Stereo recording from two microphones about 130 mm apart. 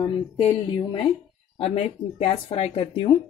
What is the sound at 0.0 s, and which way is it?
A woman's voice, 40° left (ahead or behind).